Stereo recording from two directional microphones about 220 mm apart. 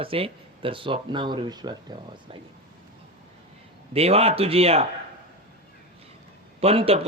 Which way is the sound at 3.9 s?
25° right (ahead or behind).